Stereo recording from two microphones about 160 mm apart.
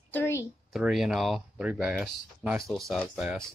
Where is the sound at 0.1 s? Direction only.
15° left (ahead or behind).